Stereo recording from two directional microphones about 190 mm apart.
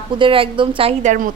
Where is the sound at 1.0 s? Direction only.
40° right (ahead or behind).